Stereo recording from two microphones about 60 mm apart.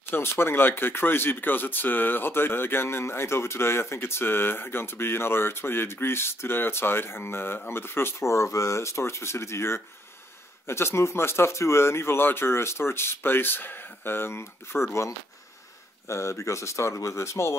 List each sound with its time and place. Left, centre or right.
0.1 s speech: left